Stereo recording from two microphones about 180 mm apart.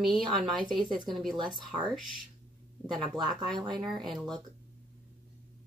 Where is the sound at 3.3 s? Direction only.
Centre (ahead or behind).